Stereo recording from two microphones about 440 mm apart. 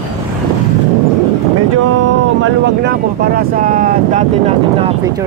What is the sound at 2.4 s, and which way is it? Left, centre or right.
Speech, right.